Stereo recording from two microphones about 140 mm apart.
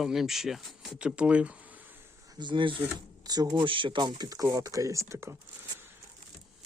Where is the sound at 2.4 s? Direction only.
35° right (ahead or behind).